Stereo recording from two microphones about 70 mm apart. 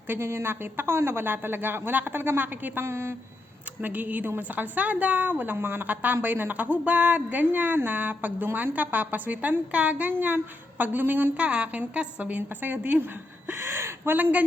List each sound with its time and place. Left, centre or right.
0.1 s a woman's voice: right
2.8 s a woman's voice: right
3.8 s speech: right